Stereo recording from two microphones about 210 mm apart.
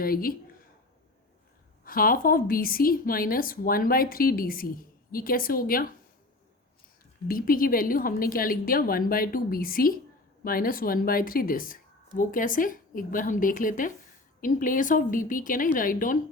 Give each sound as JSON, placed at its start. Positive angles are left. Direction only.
{"t": 0.0, "sound": "speech", "side_deg": 45}
{"t": 1.8, "sound": "a woman's voice", "side_deg": 45}
{"t": 7.3, "sound": "a woman's voice", "side_deg": 45}